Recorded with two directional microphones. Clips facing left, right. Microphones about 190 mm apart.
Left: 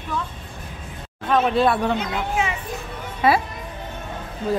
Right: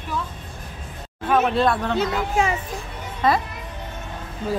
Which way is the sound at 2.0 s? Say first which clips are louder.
Right 3 dB; 40° right (ahead or behind).